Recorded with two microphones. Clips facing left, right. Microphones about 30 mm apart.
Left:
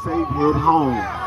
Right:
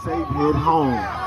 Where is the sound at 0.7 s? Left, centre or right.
Right.